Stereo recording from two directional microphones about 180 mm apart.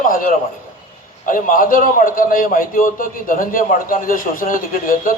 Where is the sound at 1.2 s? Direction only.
50° left (ahead or behind).